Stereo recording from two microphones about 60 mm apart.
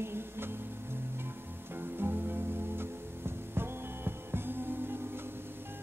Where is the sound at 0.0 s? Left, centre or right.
Right.